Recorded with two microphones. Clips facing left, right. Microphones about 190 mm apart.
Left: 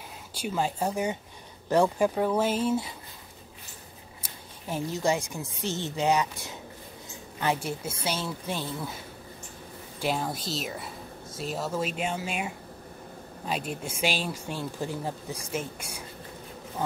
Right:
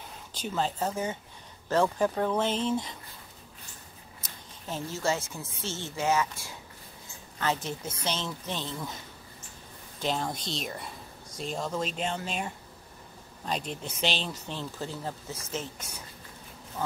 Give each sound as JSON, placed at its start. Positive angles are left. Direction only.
{"t": 0.3, "sound": "speech", "side_deg": 10}
{"t": 4.2, "sound": "speech", "side_deg": 10}
{"t": 9.9, "sound": "speech", "side_deg": 10}